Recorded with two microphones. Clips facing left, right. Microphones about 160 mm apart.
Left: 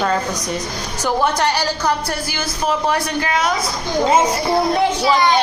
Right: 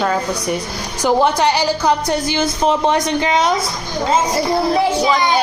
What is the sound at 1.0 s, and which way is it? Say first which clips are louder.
A woman's voice: right 4 dB; 15° right (ahead or behind).